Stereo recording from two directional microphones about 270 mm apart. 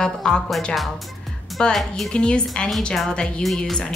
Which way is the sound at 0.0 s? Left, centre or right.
Centre.